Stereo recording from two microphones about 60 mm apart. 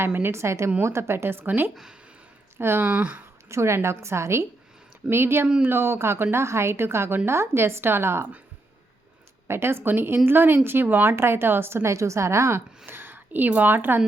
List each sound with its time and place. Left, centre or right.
0.0 s a woman's voice: right
1.7 s speech: centre
2.6 s speech: right
3.5 s a woman's voice: right
9.5 s a woman's voice: right
12.8 s a sound: right
13.5 s speech: right